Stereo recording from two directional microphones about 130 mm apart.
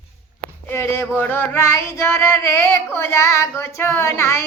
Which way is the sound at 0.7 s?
20° left (ahead or behind).